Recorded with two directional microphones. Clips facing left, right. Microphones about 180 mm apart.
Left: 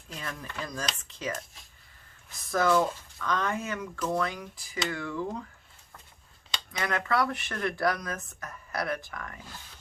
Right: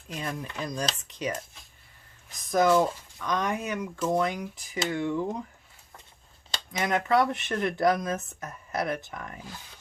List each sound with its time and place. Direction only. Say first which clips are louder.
0.1 s speech: right 5 dB; 20° right (ahead or behind)
2.5 s speech: right 3 dB; 20° right (ahead or behind)
6.7 s speech: right 4 dB; 20° right (ahead or behind)